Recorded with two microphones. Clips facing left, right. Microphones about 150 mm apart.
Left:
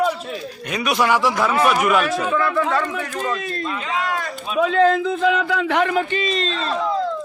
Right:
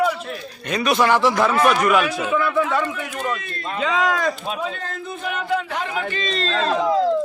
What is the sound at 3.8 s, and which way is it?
Speech, 90° right.